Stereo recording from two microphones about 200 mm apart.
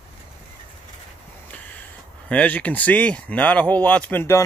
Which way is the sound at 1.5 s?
5° left (ahead or behind).